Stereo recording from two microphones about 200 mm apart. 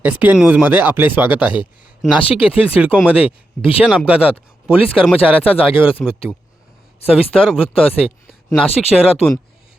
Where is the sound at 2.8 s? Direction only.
5° right (ahead or behind).